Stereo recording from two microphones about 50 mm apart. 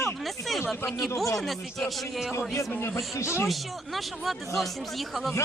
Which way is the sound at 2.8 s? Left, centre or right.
Left.